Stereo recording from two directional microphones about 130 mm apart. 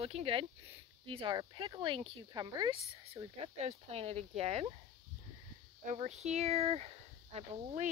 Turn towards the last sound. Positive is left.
turn(degrees=-50)  # may be behind; listen again after turning